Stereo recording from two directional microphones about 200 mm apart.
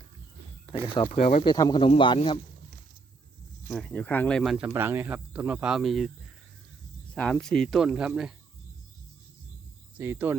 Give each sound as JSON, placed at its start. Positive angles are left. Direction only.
{"t": 1.0, "sound": "speech", "side_deg": 35}
{"t": 1.5, "sound": "speech", "side_deg": 20}
{"t": 3.7, "sound": "speech", "side_deg": 0}
{"t": 7.1, "sound": "speech", "side_deg": 5}
{"t": 10.0, "sound": "speech", "side_deg": -10}